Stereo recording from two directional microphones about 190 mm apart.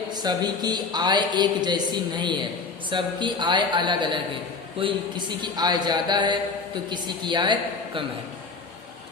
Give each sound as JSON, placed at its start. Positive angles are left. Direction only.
{"t": 0.1, "sound": "a man's voice", "side_deg": -20}